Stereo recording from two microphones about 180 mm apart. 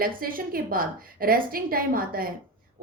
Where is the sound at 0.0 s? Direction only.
55° right (ahead or behind).